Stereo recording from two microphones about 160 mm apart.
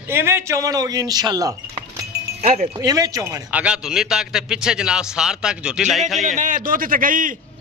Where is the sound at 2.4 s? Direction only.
40° right (ahead or behind).